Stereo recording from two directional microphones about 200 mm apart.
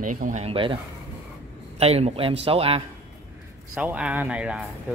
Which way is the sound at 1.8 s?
30° right (ahead or behind).